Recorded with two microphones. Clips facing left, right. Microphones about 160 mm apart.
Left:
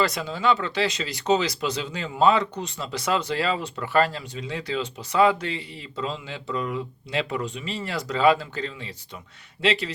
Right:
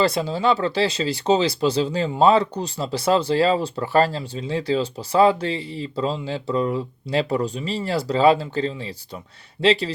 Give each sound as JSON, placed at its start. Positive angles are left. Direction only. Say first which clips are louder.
{"t": 0.0, "sound": "speech", "louder": "right 4 dB", "side_deg": -30}